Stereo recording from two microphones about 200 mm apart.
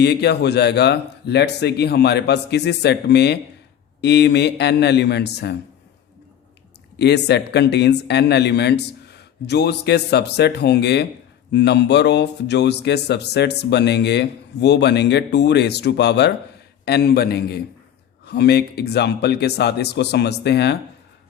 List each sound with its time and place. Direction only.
0.0 s speech: 55° left (ahead or behind)
7.0 s a man's voice: 60° left (ahead or behind)